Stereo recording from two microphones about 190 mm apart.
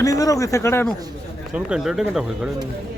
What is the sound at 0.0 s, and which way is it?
Speech, 20° left (ahead or behind).